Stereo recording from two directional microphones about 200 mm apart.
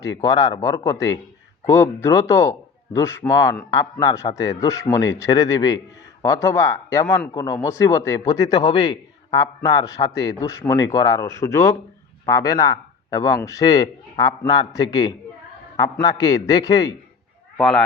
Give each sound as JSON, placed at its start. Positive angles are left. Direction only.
{"t": 0.0, "sound": "a man's voice", "side_deg": 15}
{"t": 17.6, "sound": "speech", "side_deg": 5}